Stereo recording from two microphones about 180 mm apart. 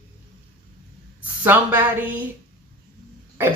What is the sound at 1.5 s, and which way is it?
Speech, 10° right (ahead or behind).